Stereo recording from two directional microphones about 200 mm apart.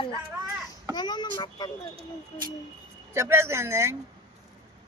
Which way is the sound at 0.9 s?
20° left (ahead or behind).